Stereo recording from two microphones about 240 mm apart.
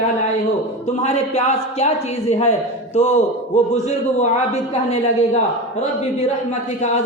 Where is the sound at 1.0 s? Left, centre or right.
Left.